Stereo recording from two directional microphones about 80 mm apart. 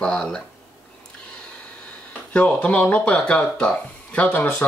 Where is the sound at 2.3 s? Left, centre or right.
Centre.